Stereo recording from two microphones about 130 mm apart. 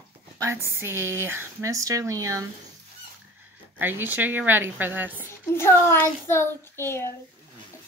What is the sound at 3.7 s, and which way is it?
A woman's voice, 15° right (ahead or behind).